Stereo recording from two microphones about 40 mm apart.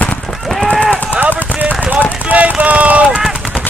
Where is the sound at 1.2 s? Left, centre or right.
Right.